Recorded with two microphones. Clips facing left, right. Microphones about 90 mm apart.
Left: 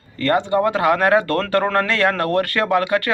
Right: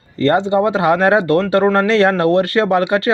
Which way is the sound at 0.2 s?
30° right (ahead or behind).